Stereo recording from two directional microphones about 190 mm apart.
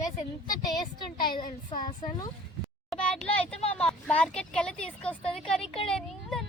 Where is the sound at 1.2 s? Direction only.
45° left (ahead or behind).